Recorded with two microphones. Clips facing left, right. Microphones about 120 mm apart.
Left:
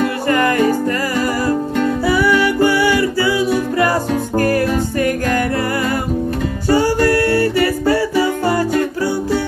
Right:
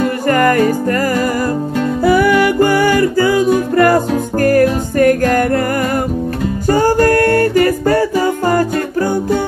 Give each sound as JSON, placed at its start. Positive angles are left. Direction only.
{"t": 0.3, "sound": "music", "side_deg": -40}
{"t": 2.0, "sound": "music", "side_deg": -50}
{"t": 6.7, "sound": "music", "side_deg": -45}